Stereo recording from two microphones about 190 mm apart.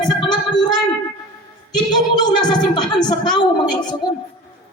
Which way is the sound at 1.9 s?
20° left (ahead or behind).